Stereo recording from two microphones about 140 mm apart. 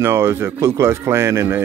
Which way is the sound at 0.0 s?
20° right (ahead or behind).